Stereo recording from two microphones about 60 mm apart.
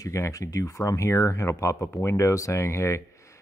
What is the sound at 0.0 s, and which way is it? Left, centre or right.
A man's voice, left.